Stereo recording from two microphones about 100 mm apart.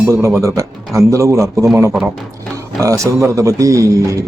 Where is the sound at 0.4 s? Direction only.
30° right (ahead or behind).